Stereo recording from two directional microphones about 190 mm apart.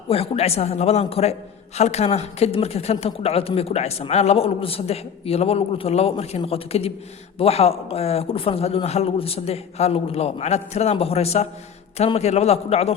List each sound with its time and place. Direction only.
0.1 s speech: 30° left (ahead or behind)